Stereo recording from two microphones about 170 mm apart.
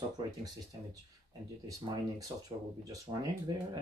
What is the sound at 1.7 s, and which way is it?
Speech, 20° right (ahead or behind).